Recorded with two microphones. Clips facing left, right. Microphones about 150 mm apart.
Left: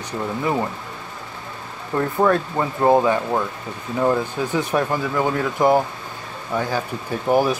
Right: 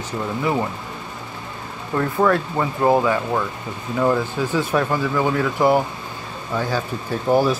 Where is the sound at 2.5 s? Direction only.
20° left (ahead or behind).